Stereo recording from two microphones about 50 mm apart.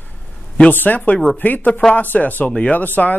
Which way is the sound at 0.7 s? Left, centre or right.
Left.